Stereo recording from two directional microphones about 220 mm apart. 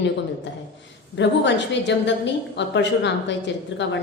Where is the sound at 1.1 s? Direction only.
55° left (ahead or behind).